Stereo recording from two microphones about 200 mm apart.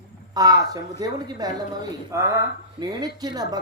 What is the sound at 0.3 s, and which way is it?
Speech, 20° right (ahead or behind).